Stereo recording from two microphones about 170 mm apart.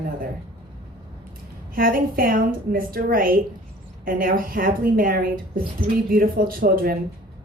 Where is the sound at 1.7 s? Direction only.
55° right (ahead or behind).